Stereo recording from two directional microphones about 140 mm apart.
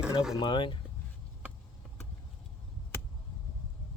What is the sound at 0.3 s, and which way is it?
Speech, 35° left (ahead or behind).